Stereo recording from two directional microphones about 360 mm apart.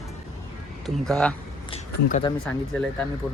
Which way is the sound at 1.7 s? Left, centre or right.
Centre.